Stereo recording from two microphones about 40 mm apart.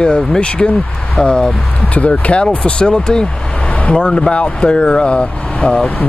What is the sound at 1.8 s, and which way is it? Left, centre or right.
Speech, left.